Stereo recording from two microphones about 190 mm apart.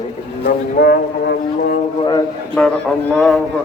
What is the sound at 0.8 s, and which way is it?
Music, 55° left (ahead or behind).